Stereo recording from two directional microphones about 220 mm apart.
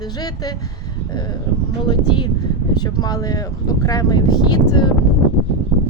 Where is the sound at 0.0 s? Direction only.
15° left (ahead or behind).